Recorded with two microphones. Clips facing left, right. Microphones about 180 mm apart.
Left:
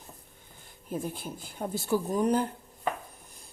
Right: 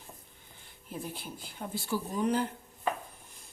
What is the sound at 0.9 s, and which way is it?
Speech, 45° left (ahead or behind).